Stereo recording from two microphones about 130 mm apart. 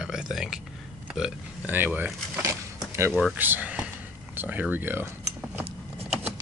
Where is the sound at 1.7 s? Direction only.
15° right (ahead or behind).